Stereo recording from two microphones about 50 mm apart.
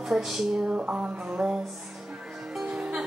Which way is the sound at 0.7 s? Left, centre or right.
Right.